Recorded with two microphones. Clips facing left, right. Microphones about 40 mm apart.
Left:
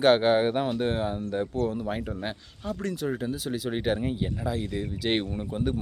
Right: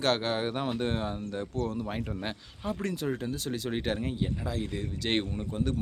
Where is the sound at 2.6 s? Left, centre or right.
Centre.